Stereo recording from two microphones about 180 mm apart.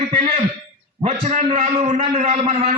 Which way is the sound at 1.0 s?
35° right (ahead or behind).